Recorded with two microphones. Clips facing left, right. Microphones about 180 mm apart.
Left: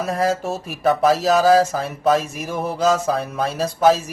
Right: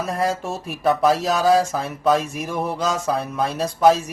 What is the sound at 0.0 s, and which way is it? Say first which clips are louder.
Speech: left 2 dB; centre (ahead or behind).